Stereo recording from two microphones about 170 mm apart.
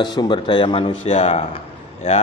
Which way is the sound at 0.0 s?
25° left (ahead or behind).